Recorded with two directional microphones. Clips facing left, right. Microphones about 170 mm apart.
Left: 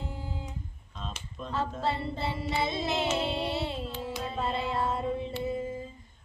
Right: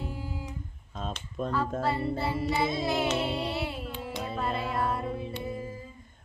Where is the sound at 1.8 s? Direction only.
25° left (ahead or behind).